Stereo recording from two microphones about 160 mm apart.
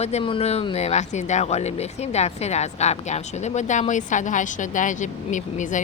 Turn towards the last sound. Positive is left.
turn(degrees=50)  # may be behind; listen again after turning